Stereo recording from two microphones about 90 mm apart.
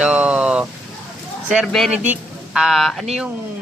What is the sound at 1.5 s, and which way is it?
Speech, centre (ahead or behind).